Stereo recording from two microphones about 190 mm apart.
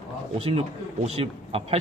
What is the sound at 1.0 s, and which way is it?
Speech, 30° right (ahead or behind).